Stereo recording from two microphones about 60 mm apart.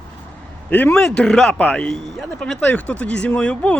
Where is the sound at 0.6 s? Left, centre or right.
Left.